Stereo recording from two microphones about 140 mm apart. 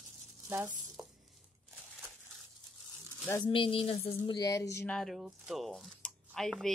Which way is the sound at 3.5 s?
40° left (ahead or behind).